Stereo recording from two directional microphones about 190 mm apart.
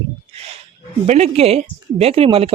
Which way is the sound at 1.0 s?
35° right (ahead or behind).